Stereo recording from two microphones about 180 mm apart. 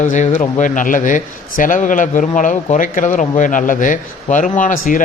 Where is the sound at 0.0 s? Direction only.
45° left (ahead or behind).